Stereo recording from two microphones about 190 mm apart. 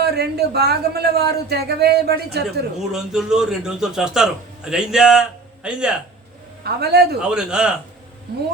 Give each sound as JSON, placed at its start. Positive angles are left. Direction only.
{"t": 0.0, "sound": "a man's voice", "side_deg": -55}
{"t": 2.9, "sound": "a man's voice", "side_deg": -5}
{"t": 6.7, "sound": "a man's voice", "side_deg": -60}
{"t": 7.2, "sound": "a man's voice", "side_deg": -5}